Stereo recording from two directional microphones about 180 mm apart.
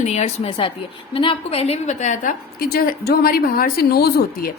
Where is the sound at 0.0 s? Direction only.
40° left (ahead or behind).